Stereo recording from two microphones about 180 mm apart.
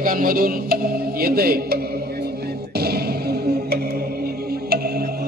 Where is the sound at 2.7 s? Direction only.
60° right (ahead or behind).